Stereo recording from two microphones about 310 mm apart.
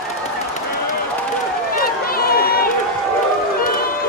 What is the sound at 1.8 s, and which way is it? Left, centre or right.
Run, left.